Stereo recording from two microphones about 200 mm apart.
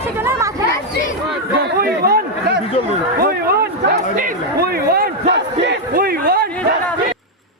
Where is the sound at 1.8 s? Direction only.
50° right (ahead or behind).